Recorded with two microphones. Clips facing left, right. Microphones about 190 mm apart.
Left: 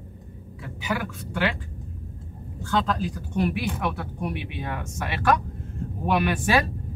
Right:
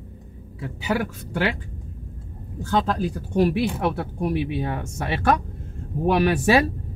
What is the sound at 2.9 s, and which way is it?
Speech, 35° right (ahead or behind).